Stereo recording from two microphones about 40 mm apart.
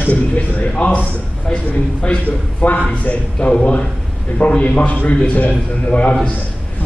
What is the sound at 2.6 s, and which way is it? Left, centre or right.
A man's voice, left.